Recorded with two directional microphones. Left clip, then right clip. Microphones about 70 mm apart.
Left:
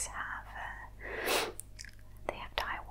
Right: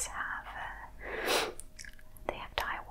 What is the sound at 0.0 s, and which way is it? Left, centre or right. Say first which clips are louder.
Whispering: right 2 dB; left.